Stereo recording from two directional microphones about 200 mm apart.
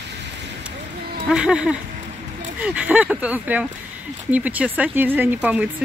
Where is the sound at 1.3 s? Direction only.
5° right (ahead or behind).